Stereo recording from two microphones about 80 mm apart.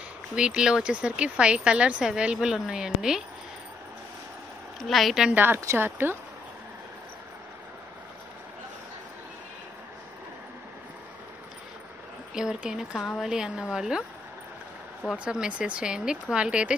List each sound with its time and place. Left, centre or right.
0.4 s a woman's voice: centre
4.7 s a woman's voice: centre
5.3 s speech: right
12.4 s a woman's voice: centre
13.0 s a woman's voice: centre
13.3 s a woman's voice: centre
15.1 s a woman's voice: centre